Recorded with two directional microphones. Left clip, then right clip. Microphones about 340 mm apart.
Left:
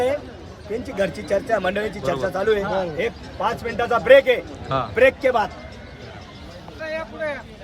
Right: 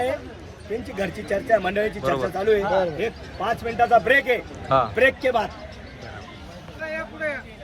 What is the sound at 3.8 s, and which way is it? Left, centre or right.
A man's voice, centre.